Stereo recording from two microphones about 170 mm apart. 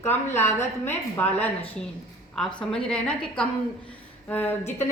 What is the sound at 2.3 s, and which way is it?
A woman's voice, 5° left (ahead or behind).